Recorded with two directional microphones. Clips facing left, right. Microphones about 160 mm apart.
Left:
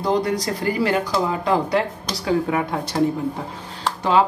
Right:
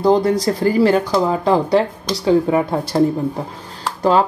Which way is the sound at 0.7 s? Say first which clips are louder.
Right 6 dB; 35° right (ahead or behind).